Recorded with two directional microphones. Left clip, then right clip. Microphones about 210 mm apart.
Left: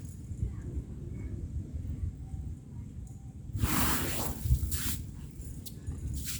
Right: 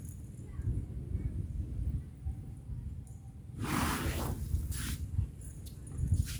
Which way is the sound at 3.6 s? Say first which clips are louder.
Left 2 dB; 50° left (ahead or behind).